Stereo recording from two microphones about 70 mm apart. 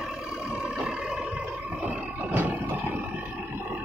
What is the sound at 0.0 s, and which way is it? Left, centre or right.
Vehicle, centre.